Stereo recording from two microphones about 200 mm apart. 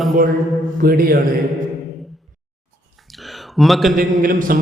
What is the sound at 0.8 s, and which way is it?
Speech, 50° right (ahead or behind).